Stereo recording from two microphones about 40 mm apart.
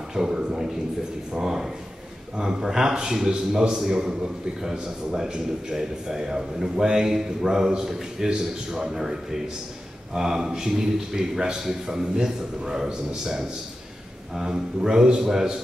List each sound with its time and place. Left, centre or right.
0.1 s a man's voice: centre
5.3 s a man's voice: centre